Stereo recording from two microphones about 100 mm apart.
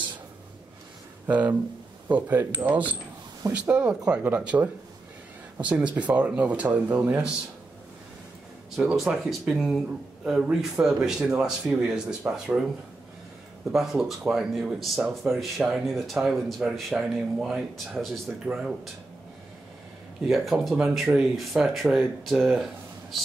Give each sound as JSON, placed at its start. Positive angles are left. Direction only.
{"t": 1.2, "sound": "speech", "side_deg": -15}
{"t": 5.7, "sound": "speech", "side_deg": -15}
{"t": 8.7, "sound": "speech", "side_deg": 0}
{"t": 13.7, "sound": "speech", "side_deg": -5}
{"t": 20.2, "sound": "speech", "side_deg": 0}
{"t": 22.2, "sound": "speech", "side_deg": 0}